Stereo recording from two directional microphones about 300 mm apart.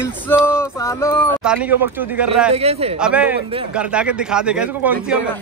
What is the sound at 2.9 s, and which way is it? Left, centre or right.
Speech, centre.